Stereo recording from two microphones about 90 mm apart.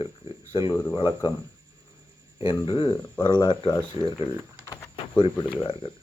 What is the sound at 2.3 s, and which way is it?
Speech, 70° left (ahead or behind).